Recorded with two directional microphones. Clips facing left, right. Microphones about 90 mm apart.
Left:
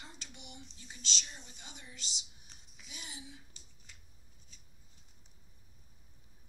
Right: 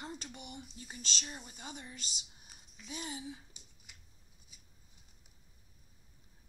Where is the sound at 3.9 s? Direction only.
15° right (ahead or behind).